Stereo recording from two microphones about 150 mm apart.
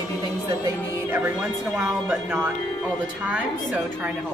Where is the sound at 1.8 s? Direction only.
Centre (ahead or behind).